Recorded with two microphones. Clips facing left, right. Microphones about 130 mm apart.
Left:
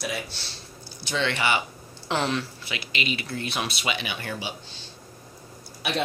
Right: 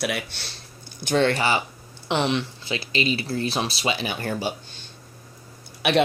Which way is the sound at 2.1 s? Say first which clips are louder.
Right 3 dB; 20° right (ahead or behind).